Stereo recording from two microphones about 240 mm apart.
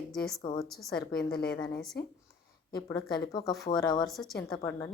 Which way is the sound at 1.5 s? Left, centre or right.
Centre.